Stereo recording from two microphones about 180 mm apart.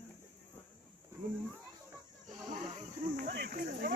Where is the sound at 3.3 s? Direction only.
55° right (ahead or behind).